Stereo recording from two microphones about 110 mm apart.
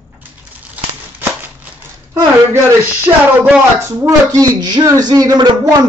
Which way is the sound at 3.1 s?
35° right (ahead or behind).